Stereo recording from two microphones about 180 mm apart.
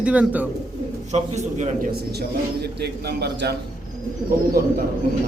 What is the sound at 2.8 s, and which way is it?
Speech, 65° right (ahead or behind).